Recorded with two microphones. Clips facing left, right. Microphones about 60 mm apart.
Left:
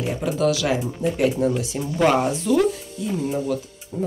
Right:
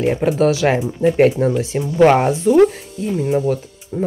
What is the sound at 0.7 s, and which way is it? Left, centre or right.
A woman's voice, right.